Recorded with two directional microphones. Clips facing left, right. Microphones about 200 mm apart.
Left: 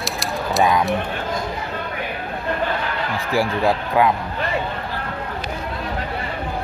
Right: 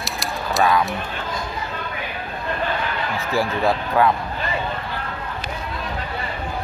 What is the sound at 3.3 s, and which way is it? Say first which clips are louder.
Speech: left 1 dB; 15° left (ahead or behind).